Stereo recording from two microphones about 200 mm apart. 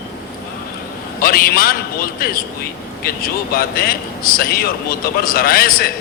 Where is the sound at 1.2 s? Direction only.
45° left (ahead or behind).